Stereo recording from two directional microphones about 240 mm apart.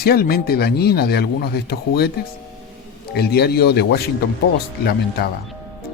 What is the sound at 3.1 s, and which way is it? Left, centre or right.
Speech, left.